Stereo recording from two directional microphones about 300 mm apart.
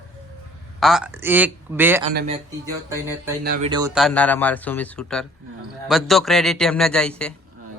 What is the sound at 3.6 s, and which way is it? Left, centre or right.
Speech, centre.